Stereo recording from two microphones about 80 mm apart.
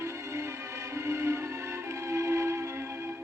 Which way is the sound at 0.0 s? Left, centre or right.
Right.